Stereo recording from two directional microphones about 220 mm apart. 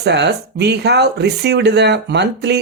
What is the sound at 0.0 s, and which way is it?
Speech, 50° right (ahead or behind).